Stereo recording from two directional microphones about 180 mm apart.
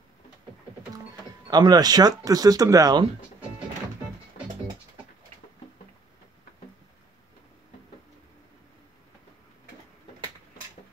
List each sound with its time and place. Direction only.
1.5 s speech: 20° right (ahead or behind)
4.4 s music: 45° left (ahead or behind)